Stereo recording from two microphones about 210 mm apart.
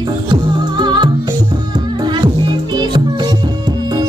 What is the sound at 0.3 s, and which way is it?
Music, 20° right (ahead or behind).